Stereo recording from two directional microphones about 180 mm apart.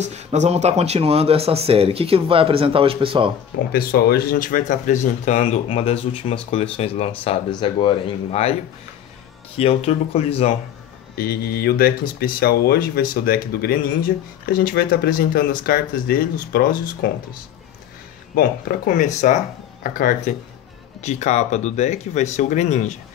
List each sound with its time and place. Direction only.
0.0 s speech: 40° right (ahead or behind)
3.7 s speech: 55° left (ahead or behind); by 8.5 s 35° left (ahead or behind)
9.6 s speech: 35° left (ahead or behind)
11.1 s speech: 55° left (ahead or behind)
18.3 s speech: 60° left (ahead or behind); by 22.9 s 40° left (ahead or behind)